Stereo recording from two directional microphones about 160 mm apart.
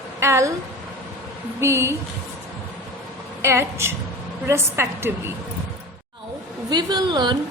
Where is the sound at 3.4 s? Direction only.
15° right (ahead or behind).